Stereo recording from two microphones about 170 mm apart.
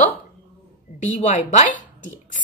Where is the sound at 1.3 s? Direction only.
45° left (ahead or behind).